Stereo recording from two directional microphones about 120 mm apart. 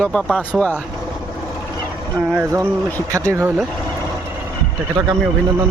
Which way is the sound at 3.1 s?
25° right (ahead or behind).